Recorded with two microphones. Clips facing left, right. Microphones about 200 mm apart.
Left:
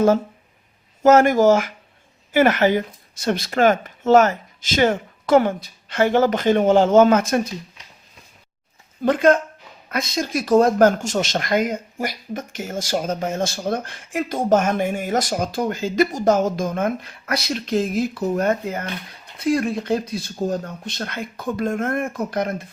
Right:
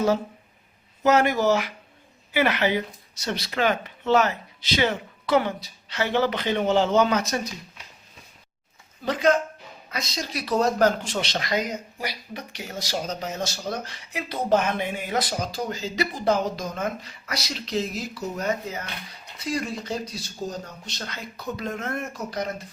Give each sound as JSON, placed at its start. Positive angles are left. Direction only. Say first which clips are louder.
{"t": 1.0, "sound": "speech", "louder": "left 7 dB", "side_deg": 45}
{"t": 9.0, "sound": "speech", "louder": "left 5 dB", "side_deg": 50}